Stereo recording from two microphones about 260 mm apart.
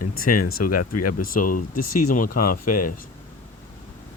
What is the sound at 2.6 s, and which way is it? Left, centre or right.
Speech, left.